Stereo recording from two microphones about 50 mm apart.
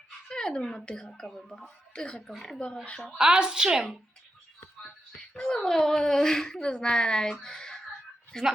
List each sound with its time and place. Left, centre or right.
0.3 s speech: centre
3.2 s a woman's voice: centre
5.3 s speech: centre